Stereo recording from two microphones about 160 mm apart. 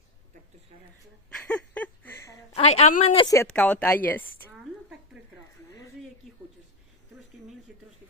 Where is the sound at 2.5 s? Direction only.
40° left (ahead or behind).